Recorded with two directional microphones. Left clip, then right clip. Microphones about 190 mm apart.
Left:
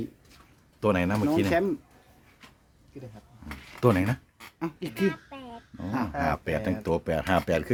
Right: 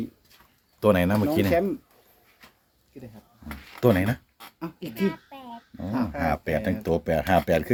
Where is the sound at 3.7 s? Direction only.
5° left (ahead or behind).